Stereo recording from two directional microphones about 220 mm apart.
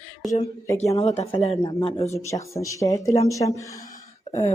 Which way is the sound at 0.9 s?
25° left (ahead or behind).